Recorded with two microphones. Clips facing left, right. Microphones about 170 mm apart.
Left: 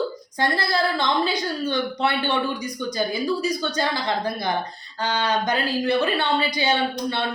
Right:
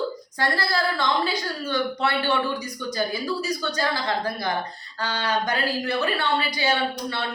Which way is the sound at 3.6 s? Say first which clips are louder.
Left 1 dB; 20° left (ahead or behind).